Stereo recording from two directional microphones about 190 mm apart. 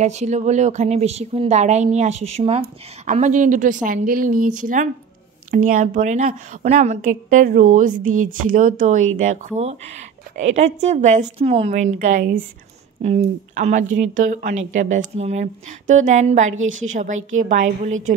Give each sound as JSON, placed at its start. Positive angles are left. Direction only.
{"t": 0.0, "sound": "a woman's voice", "side_deg": -40}
{"t": 16.5, "sound": "a woman's voice", "side_deg": -90}
{"t": 16.8, "sound": "speech", "side_deg": -40}